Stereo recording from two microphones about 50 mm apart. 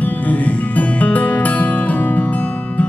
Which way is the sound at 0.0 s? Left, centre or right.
Left.